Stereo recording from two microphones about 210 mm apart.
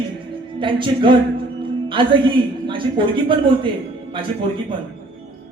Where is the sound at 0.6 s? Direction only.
25° right (ahead or behind).